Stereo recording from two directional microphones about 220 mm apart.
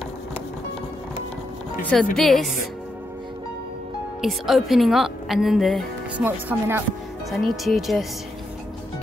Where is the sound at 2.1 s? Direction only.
Centre (ahead or behind).